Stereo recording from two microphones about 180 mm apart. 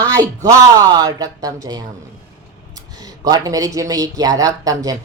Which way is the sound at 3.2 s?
20° right (ahead or behind).